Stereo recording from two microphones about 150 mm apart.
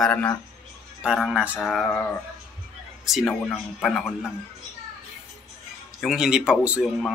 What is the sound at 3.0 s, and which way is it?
Speech, centre (ahead or behind).